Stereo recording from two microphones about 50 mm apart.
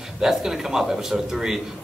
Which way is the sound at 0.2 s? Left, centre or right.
Centre.